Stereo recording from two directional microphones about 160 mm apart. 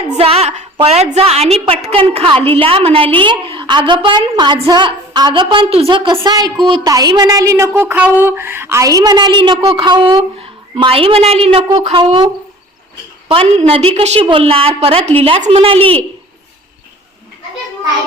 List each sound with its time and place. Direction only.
0.1 s a woman's voice: 40° right (ahead or behind)